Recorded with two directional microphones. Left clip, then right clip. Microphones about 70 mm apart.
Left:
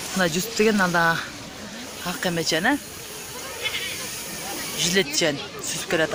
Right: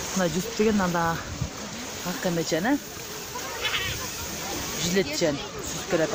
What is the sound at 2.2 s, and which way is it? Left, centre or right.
Speech, left.